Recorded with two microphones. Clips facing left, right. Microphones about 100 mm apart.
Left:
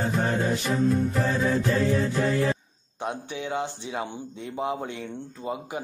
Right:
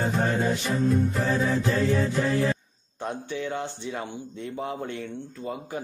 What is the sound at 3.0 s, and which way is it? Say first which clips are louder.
Speech: right 1 dB; 15° left (ahead or behind).